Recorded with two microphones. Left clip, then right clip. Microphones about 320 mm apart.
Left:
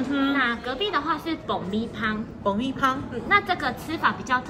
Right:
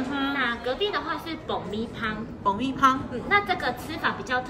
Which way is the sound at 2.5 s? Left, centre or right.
Centre.